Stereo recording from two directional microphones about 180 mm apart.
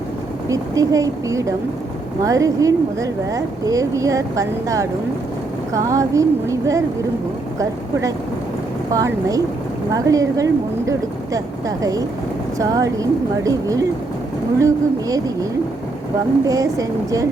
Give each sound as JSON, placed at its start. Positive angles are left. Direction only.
{"t": 0.4, "sound": "speech", "side_deg": -20}
{"t": 8.9, "sound": "speech", "side_deg": -20}
{"t": 16.5, "sound": "speech", "side_deg": -20}